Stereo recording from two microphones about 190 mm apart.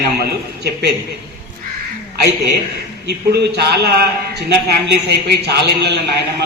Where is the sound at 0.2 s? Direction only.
55° right (ahead or behind).